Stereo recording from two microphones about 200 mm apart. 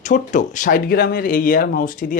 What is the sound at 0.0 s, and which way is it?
Speech, 40° left (ahead or behind).